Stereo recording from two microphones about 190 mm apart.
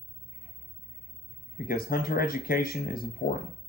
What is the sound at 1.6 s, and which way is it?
Speech, 50° left (ahead or behind).